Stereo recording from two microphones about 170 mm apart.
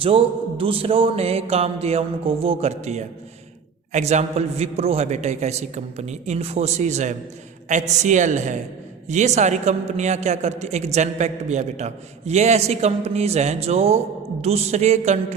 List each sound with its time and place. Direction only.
0.0 s a man's voice: 30° right (ahead or behind)